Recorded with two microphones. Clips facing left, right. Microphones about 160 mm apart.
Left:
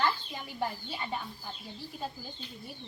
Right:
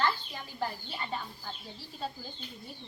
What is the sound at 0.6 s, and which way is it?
Speech, 15° left (ahead or behind).